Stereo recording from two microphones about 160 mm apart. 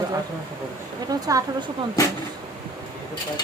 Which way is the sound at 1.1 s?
20° right (ahead or behind).